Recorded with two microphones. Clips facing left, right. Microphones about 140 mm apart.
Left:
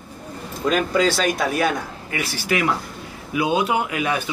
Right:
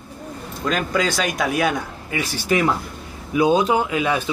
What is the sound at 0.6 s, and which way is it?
Speech, 5° left (ahead or behind).